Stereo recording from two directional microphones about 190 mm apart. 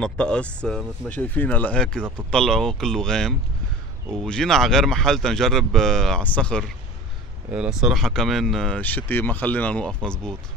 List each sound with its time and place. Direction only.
0.0 s speech: 5° left (ahead or behind)
7.5 s speech: 5° right (ahead or behind)